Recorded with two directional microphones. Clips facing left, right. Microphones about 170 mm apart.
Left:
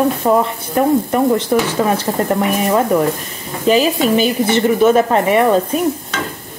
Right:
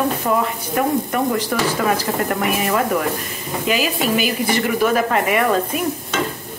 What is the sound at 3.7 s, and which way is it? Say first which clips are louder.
Speech: left 7 dB; 35° left (ahead or behind).